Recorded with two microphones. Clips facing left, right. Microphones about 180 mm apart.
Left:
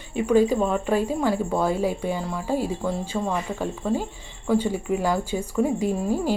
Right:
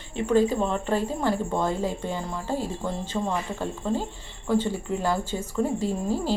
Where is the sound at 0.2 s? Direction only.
10° left (ahead or behind).